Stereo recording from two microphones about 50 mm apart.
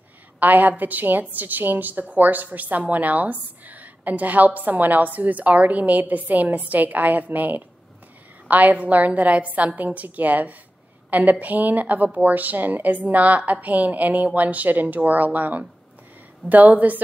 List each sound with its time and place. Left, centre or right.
0.4 s a woman's voice: right